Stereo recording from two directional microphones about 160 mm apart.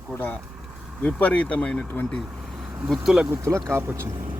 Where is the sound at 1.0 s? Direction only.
10° left (ahead or behind).